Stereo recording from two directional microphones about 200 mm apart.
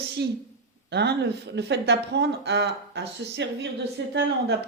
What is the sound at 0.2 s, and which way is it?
Speech, 55° right (ahead or behind).